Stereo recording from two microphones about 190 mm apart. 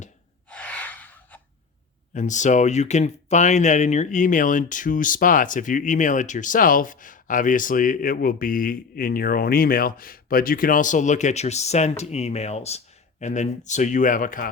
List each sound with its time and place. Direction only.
0.5 s gasp: 5° left (ahead or behind)
2.1 s speech: 40° left (ahead or behind)